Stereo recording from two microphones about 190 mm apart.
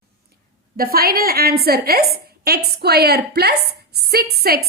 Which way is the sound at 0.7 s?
50° right (ahead or behind).